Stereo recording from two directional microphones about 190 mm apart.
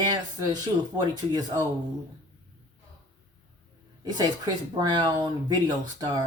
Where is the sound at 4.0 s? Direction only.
20° right (ahead or behind).